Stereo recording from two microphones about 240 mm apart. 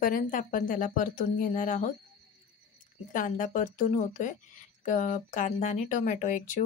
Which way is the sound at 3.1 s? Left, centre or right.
Left.